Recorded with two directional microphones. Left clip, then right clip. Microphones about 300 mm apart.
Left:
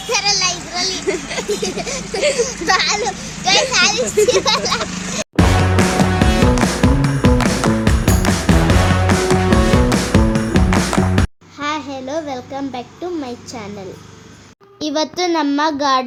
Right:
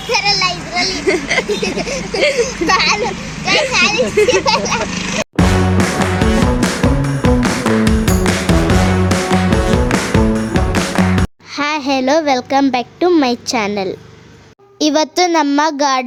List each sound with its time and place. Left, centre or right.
0.1 s children playing: left
1.0 s a sound: centre
1.6 s a child's voice: left
5.4 s music: centre
11.6 s a sound: right
14.8 s a child's voice: right